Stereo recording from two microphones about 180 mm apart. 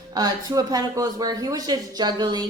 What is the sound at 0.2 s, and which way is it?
A woman's voice, 20° right (ahead or behind).